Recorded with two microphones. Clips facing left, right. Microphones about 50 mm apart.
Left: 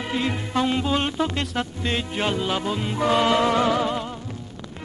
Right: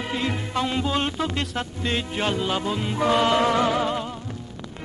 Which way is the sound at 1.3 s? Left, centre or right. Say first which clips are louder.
Left 1 dB; left.